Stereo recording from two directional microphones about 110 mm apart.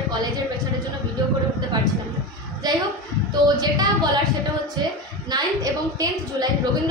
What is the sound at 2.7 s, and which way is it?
A woman's voice, 40° right (ahead or behind).